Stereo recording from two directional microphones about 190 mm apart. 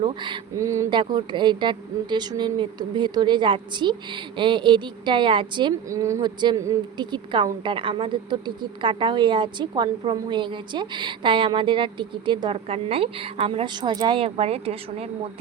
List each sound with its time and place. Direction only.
0.0 s speech: 25° right (ahead or behind)